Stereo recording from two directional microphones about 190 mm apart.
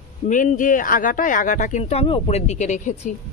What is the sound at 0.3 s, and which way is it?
Speech, 45° left (ahead or behind).